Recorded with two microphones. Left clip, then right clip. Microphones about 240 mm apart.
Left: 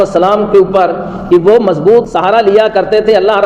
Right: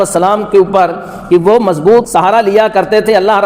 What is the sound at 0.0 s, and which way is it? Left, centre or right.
A man's voice, right.